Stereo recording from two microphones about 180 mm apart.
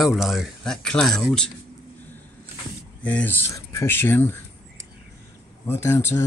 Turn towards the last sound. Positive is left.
turn(degrees=15)  # may be behind; listen again after turning